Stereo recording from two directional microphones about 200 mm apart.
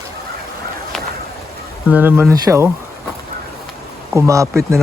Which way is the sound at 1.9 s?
10° right (ahead or behind).